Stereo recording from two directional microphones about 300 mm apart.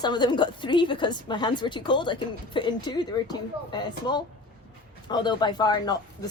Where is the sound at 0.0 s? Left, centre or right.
Centre.